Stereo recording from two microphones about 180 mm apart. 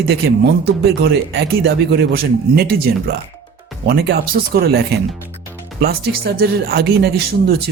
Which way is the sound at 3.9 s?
60° right (ahead or behind).